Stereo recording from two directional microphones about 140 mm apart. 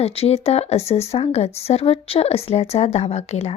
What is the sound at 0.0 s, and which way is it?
Speech, 45° left (ahead or behind).